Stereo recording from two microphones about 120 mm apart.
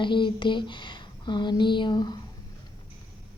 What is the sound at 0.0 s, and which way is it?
A woman's voice, 40° left (ahead or behind).